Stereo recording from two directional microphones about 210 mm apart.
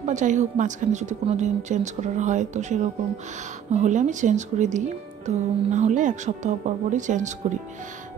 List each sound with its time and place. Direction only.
0.0 s speech: 35° right (ahead or behind)